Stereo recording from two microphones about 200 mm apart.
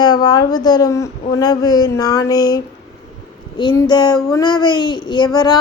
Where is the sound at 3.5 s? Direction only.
20° left (ahead or behind).